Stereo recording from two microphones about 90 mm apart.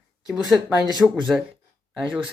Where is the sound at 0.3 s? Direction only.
Centre (ahead or behind).